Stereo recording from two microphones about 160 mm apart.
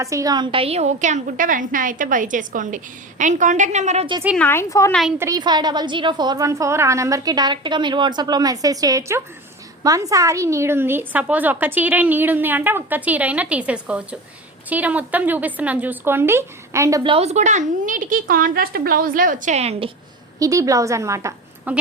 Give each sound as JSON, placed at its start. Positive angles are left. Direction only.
{"t": 0.0, "sound": "a woman's voice", "side_deg": -20}
{"t": 4.4, "sound": "speech", "side_deg": 15}
{"t": 4.9, "sound": "a woman's voice", "side_deg": 0}
{"t": 5.1, "sound": "a woman's voice", "side_deg": -15}
{"t": 5.4, "sound": "a woman's voice", "side_deg": -25}
{"t": 17.0, "sound": "a child's voice", "side_deg": -35}
{"t": 20.4, "sound": "a woman's voice", "side_deg": -20}